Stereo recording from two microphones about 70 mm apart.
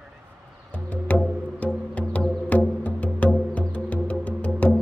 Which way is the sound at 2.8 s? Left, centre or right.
Left.